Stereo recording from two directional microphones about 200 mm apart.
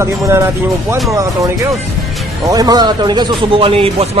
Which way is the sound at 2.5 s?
20° right (ahead or behind).